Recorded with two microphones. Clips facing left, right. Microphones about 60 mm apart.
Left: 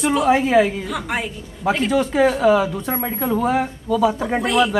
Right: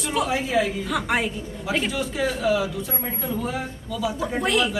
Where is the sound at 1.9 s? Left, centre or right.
Left.